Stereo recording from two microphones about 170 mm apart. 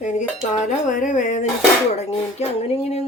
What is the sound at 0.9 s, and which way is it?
Speech, 50° left (ahead or behind).